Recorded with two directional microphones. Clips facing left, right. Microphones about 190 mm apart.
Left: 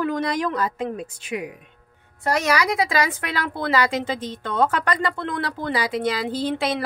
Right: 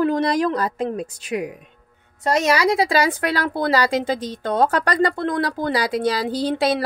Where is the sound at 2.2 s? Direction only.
25° right (ahead or behind).